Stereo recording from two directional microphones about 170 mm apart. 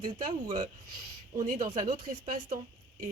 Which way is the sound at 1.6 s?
45° right (ahead or behind).